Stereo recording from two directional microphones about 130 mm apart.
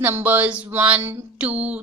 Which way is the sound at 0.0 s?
15° right (ahead or behind).